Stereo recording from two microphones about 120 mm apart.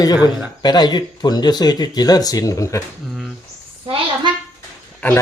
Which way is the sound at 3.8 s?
45° right (ahead or behind).